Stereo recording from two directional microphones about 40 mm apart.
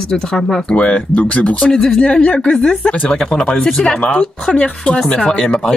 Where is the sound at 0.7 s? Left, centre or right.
Left.